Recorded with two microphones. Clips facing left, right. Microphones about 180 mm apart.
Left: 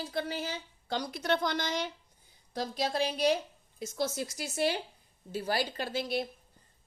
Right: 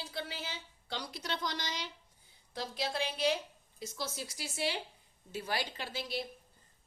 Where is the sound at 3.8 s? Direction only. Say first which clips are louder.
Left 8 dB; 50° left (ahead or behind).